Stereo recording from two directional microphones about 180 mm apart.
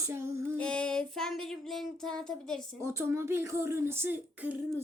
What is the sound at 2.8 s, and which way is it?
Speech, 15° right (ahead or behind).